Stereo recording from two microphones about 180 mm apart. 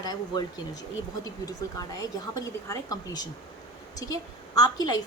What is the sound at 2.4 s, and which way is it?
Speech, 20° left (ahead or behind).